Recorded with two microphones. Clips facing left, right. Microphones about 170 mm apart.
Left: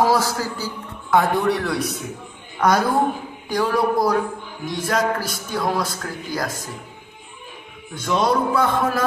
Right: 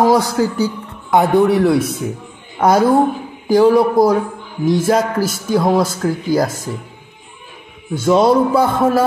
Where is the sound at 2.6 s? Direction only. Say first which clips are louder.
Right 6 dB; 25° right (ahead or behind).